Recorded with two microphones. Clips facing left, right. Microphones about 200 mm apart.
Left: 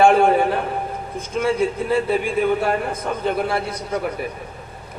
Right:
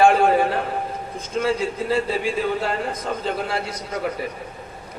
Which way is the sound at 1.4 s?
55° left (ahead or behind).